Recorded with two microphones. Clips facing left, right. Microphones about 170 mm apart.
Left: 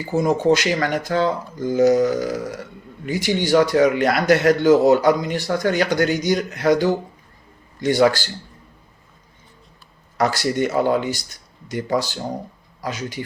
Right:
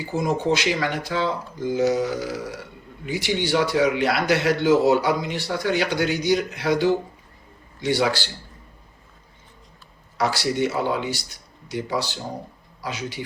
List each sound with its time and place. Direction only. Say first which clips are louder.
0.5 s speech: left 4 dB; 45° left (ahead or behind)
10.2 s speech: left 3 dB; 45° left (ahead or behind)